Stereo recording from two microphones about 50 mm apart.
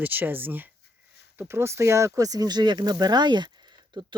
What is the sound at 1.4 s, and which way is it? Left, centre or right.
Speech, right.